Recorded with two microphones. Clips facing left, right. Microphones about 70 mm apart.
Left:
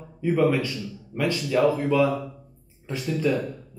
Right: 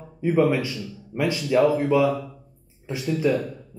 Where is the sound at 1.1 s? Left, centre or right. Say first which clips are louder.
Right 3 dB; centre.